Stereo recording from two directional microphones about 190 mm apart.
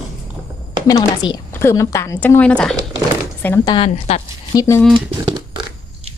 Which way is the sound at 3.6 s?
25° left (ahead or behind).